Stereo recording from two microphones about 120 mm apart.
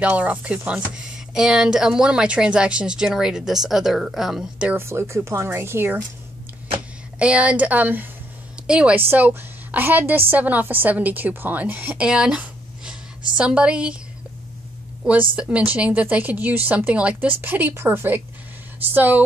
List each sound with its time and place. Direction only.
0.0 s speech: 10° right (ahead or behind)
4.7 s speech: 20° right (ahead or behind)
7.2 s a woman's voice: 10° right (ahead or behind)
15.0 s a woman's voice: 10° right (ahead or behind)